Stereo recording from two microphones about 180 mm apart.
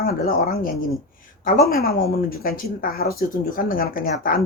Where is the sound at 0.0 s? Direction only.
55° left (ahead or behind).